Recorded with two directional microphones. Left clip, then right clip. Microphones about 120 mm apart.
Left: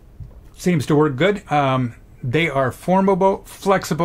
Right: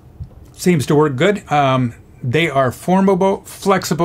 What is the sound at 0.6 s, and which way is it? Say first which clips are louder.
Speech: right 3 dB; 40° left (ahead or behind).